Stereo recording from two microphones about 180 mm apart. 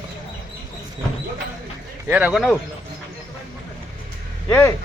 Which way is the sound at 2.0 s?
10° right (ahead or behind).